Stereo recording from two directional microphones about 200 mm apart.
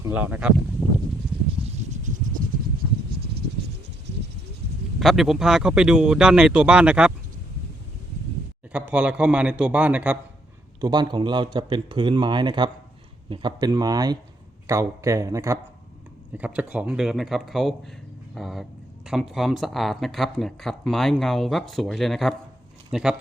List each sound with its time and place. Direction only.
0.0 s a man's voice: 10° right (ahead or behind)
1.6 s a sound: 40° right (ahead or behind)
4.9 s speech: centre (ahead or behind)
8.7 s a man's voice: 5° right (ahead or behind)
10.8 s a man's voice: 20° right (ahead or behind); by 23.1 s 5° right (ahead or behind)